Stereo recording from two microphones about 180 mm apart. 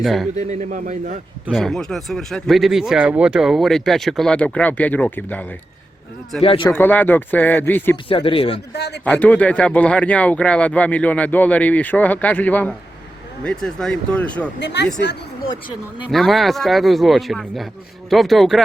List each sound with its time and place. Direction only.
0.0 s speech: centre (ahead or behind)
0.3 s a man's voice: 40° right (ahead or behind)
1.5 s speech: centre (ahead or behind)
6.4 s speech: 30° left (ahead or behind)
6.7 s speech: 10° left (ahead or behind)
8.0 s speech: 30° left (ahead or behind)
8.7 s speech: 65° left (ahead or behind)
9.0 s speech: 10° left (ahead or behind)
14.6 s speech: 70° left (ahead or behind)
16.0 s speech: centre (ahead or behind)